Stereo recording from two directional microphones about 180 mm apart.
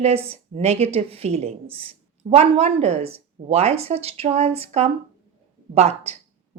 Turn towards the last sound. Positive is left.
turn(degrees=-35)  # may be behind; listen again after turning